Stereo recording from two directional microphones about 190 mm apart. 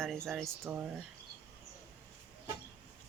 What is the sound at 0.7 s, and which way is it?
Speech, 10° right (ahead or behind).